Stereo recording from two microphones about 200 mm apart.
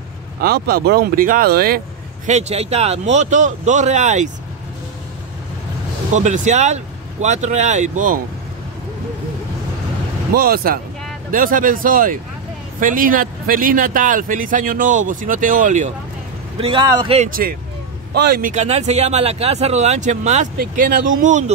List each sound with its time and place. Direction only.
0.4 s speech: 50° right (ahead or behind)
2.2 s speech: 35° right (ahead or behind)
6.1 s speech: 35° right (ahead or behind)
10.3 s speech: 50° right (ahead or behind)
16.5 s a man's voice: 25° right (ahead or behind)
17.3 s speech: 45° right (ahead or behind)
18.5 s speech: 35° right (ahead or behind)